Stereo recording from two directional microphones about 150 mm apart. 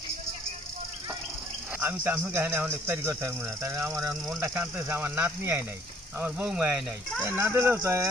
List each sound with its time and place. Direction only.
1.8 s speech: 15° right (ahead or behind)